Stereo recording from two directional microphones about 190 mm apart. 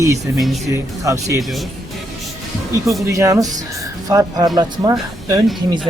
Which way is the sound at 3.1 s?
15° right (ahead or behind).